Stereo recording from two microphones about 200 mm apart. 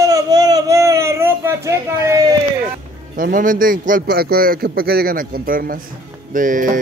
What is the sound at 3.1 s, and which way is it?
A man's voice, 45° right (ahead or behind).